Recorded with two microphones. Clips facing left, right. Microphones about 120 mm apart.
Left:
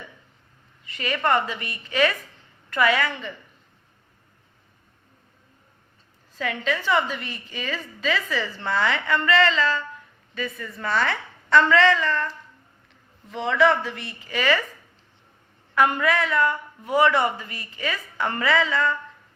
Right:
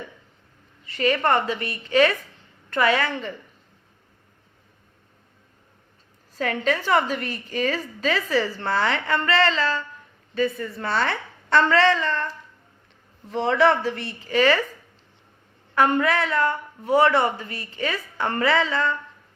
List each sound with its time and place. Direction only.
0.9 s a woman's voice: 35° right (ahead or behind)
6.3 s a woman's voice: 40° right (ahead or behind)
13.3 s a woman's voice: 35° right (ahead or behind)
15.7 s a woman's voice: 30° right (ahead or behind)